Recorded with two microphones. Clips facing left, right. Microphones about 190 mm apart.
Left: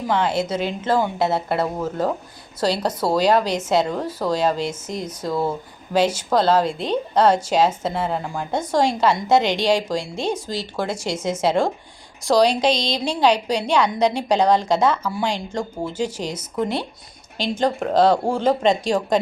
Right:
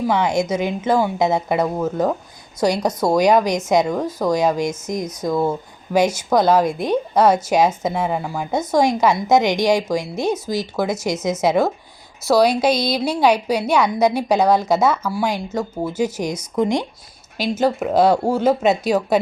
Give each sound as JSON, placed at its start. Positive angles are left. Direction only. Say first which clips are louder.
{"t": 0.1, "sound": "a woman's voice", "louder": "even", "side_deg": -15}